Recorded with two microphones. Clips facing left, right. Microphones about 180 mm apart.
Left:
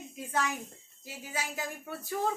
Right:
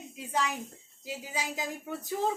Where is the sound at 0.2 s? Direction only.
15° right (ahead or behind).